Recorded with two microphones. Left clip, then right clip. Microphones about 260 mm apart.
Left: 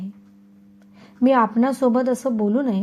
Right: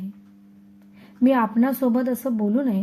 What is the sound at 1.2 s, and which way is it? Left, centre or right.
A woman's voice, centre.